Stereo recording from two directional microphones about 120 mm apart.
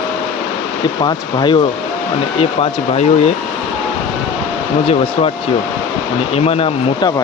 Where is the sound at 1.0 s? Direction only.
35° left (ahead or behind).